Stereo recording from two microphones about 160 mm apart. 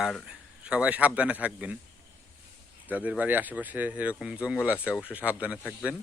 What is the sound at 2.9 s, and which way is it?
Speech, 10° right (ahead or behind).